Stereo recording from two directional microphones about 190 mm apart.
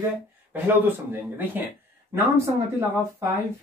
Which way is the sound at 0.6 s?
10° right (ahead or behind).